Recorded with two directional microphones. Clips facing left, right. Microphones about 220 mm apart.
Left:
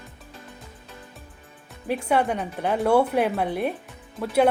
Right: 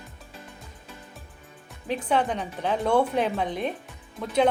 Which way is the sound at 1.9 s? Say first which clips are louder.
Left 2 dB; 10° left (ahead or behind).